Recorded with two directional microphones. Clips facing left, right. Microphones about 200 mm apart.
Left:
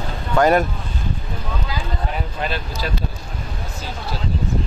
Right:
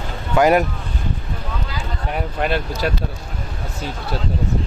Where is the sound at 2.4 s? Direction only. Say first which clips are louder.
Right 6 dB; 60° right (ahead or behind).